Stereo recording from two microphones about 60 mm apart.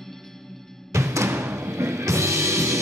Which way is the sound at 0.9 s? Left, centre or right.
Right.